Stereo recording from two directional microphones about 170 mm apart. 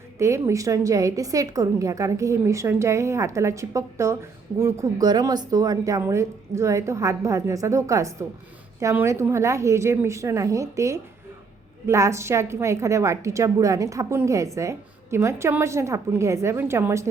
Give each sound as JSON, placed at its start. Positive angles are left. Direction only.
{"t": 0.2, "sound": "a woman's voice", "side_deg": -15}